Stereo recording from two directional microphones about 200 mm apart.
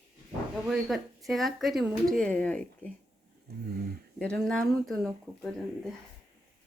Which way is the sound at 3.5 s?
55° right (ahead or behind).